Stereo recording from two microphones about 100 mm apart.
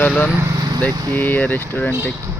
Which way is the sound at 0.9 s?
40° right (ahead or behind).